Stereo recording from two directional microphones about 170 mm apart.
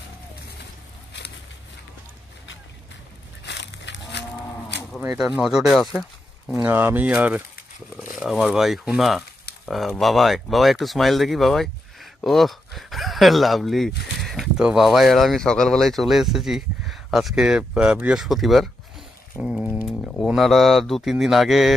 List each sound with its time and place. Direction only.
3.4 s a sound: 90° left
5.1 s speech: 5° right (ahead or behind)
6.5 s speech: 10° right (ahead or behind)